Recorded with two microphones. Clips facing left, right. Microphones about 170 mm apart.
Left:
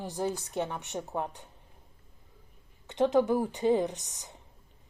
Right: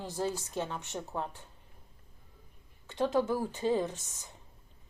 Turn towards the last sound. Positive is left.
turn(degrees=20)  # may be behind; listen again after turning